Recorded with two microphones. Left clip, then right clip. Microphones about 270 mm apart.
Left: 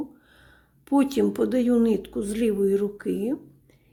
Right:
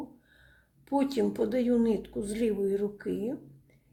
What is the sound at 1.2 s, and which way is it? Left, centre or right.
Speech, left.